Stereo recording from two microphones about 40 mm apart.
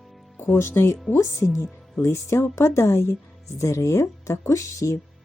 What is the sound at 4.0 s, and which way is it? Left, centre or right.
Speech, left.